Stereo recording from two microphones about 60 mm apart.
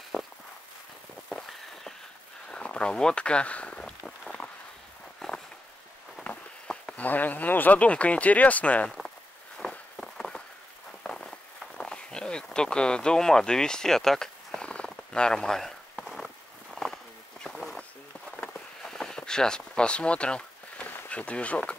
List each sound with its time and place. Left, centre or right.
0.1 s walk: centre
2.5 s a sound: centre
5.2 s walk: centre
7.0 s speech: left
9.6 s walk: centre
10.0 s a sound: centre
16.7 s walk: centre
18.8 s a sound: centre
21.1 s speech: left